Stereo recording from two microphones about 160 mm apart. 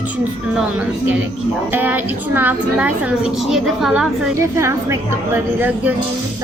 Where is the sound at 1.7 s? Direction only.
10° right (ahead or behind).